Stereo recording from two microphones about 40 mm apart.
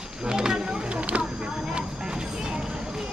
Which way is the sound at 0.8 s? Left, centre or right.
Right.